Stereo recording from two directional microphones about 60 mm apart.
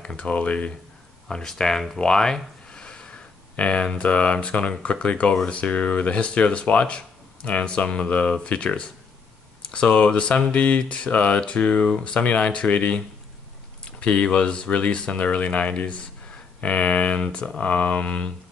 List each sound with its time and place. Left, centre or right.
0.0 s speech: centre
1.3 s speech: centre
5.5 s a sound: left